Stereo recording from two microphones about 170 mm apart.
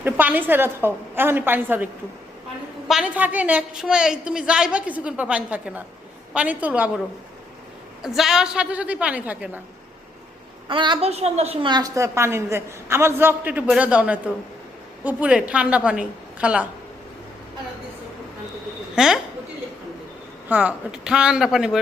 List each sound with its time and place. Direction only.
0.0 s a woman's voice: 10° right (ahead or behind)
8.0 s a woman's voice: centre (ahead or behind)
10.7 s a woman's voice: 30° right (ahead or behind)
11.7 s a woman's voice: 20° right (ahead or behind)
18.9 s speech: 5° right (ahead or behind)
20.5 s speech: 10° right (ahead or behind)